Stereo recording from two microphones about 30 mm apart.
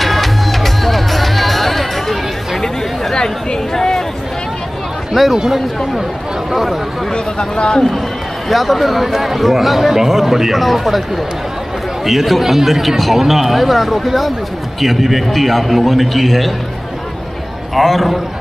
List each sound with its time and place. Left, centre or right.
0.0 s music: centre
2.6 s chatter: centre
3.7 s a sound: centre
5.3 s speech: centre
7.1 s speech: left
8.5 s speech: centre
12.0 s speech: centre
17.7 s speech: centre